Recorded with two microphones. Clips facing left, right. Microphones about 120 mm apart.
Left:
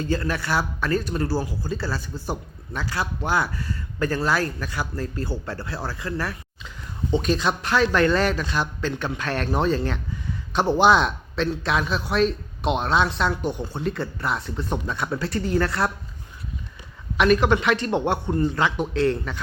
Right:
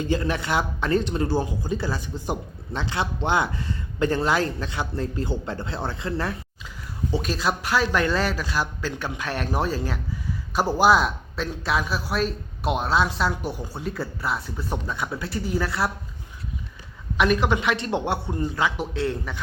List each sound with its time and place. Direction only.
0.0 s speech: 20° right (ahead or behind)
7.1 s a man's voice: 5° right (ahead or behind)
17.2 s speech: 15° right (ahead or behind)